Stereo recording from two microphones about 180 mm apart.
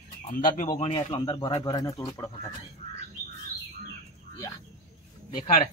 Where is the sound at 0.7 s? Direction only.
30° left (ahead or behind).